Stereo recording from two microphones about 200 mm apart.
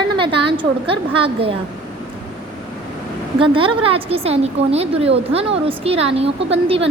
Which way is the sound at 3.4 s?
25° right (ahead or behind).